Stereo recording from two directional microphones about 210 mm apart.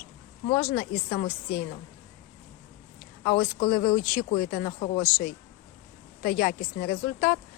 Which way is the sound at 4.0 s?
45° left (ahead or behind).